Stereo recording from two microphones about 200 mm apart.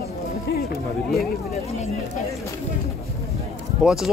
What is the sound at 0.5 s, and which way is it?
Music, 50° left (ahead or behind).